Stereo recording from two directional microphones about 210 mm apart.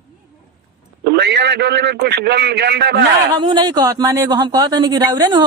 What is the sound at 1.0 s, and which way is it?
A man's voice, 50° right (ahead or behind).